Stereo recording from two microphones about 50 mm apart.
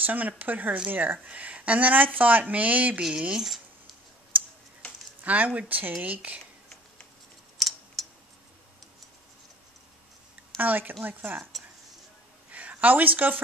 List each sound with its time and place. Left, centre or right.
0.0 s speech: right
3.0 s speech: centre
5.2 s speech: right
7.5 s a sound: centre
10.6 s speech: right
12.4 s a sound: right